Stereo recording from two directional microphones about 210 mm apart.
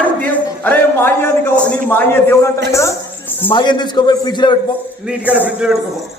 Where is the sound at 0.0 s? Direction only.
5° left (ahead or behind).